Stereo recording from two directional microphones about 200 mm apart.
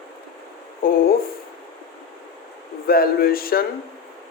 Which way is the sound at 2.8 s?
50° left (ahead or behind).